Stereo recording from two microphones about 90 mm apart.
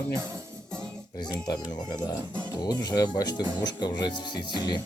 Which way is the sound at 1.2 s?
50° left (ahead or behind).